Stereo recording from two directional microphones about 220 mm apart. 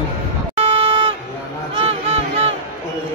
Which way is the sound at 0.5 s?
25° right (ahead or behind).